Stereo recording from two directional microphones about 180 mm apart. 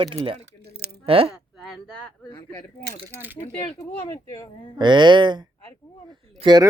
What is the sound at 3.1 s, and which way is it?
Speech, 10° right (ahead or behind).